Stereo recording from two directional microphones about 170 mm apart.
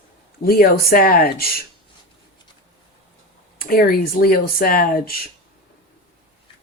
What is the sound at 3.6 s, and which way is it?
Speech, 60° left (ahead or behind).